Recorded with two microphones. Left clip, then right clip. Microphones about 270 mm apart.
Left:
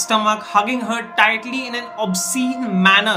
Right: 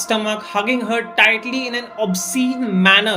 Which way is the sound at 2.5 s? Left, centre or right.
Left.